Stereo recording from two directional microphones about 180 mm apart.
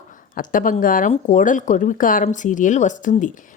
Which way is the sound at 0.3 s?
50° left (ahead or behind).